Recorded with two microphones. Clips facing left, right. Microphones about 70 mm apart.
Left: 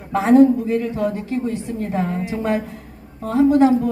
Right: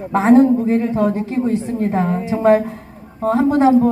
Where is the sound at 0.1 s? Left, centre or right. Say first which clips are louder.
Right 1 dB; right.